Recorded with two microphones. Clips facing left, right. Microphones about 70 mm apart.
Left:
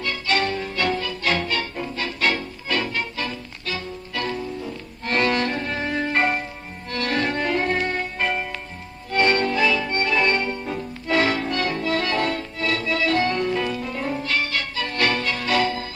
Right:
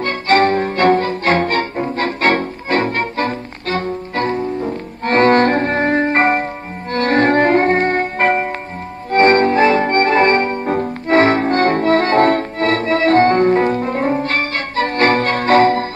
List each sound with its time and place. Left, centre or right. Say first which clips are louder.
0.0 s music: right 10 dB; right